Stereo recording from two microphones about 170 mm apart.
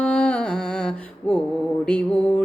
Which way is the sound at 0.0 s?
5° left (ahead or behind).